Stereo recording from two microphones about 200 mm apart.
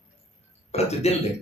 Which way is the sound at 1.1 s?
30° left (ahead or behind).